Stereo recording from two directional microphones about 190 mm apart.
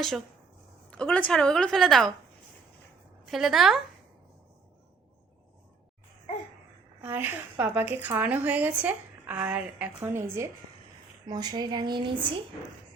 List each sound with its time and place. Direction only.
0.9 s a woman's voice: 5° left (ahead or behind)
3.2 s a woman's voice: centre (ahead or behind)
7.0 s a woman's voice: 10° right (ahead or behind)